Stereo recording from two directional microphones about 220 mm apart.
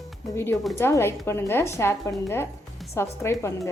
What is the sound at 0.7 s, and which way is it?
A woman's voice, 10° left (ahead or behind).